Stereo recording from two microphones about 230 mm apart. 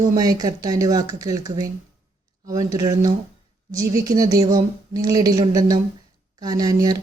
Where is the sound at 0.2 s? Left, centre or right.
Centre.